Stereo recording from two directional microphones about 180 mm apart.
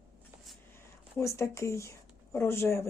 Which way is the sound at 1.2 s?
15° left (ahead or behind).